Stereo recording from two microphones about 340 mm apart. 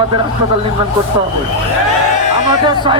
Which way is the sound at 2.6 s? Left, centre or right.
Centre.